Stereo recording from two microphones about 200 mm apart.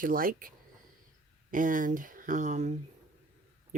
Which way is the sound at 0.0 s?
45° right (ahead or behind).